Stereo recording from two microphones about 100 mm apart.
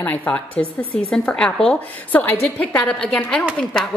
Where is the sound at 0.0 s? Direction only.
15° left (ahead or behind).